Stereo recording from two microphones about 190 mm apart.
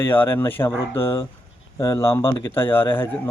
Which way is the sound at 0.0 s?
10° left (ahead or behind).